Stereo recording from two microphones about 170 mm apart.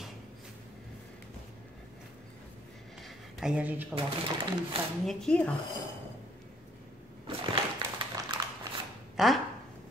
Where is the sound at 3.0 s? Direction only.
5° right (ahead or behind).